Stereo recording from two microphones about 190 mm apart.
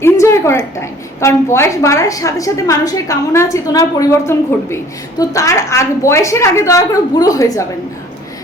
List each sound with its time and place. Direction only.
0.0 s a woman's voice: 15° left (ahead or behind)